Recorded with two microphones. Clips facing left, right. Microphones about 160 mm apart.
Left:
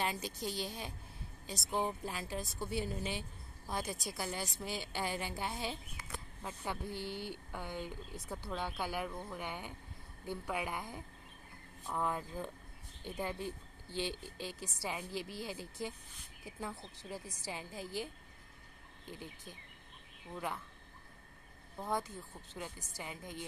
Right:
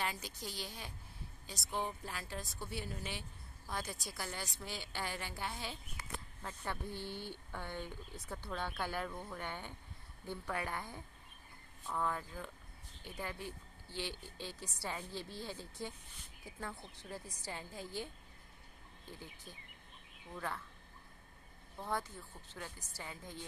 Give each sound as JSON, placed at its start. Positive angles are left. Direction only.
{"t": 0.0, "sound": "a woman's voice", "side_deg": 20}
{"t": 21.7, "sound": "a woman's voice", "side_deg": 15}